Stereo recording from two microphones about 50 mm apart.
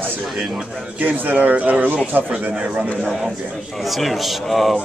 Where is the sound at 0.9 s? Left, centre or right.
Right.